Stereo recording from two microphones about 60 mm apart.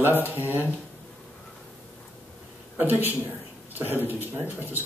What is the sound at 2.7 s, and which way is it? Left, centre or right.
Speech, right.